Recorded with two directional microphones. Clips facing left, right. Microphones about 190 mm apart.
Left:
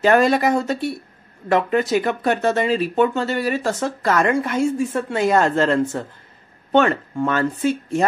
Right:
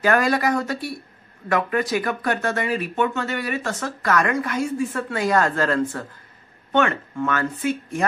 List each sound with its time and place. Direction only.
0.0 s speech: 25° left (ahead or behind)